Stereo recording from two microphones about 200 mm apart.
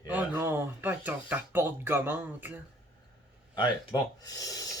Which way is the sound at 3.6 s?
20° left (ahead or behind).